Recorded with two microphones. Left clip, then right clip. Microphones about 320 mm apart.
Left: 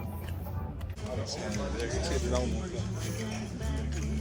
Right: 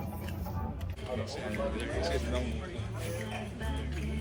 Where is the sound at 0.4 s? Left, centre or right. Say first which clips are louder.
Right 4 dB; right.